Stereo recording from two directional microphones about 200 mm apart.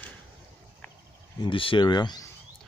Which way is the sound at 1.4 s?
25° left (ahead or behind).